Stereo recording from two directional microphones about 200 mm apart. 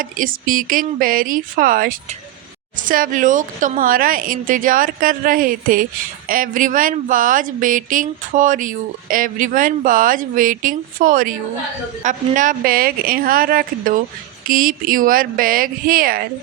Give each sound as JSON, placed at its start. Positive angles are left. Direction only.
{"t": 0.0, "sound": "speech", "side_deg": -45}